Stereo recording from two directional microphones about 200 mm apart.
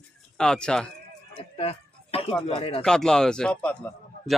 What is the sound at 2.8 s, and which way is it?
Speech, 5° left (ahead or behind).